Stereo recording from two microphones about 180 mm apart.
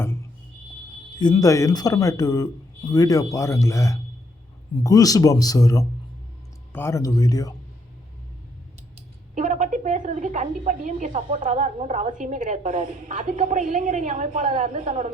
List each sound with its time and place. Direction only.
0.0 s a sound: 15° left (ahead or behind)
1.2 s speech: 20° left (ahead or behind)
9.0 s a woman's voice: 40° right (ahead or behind)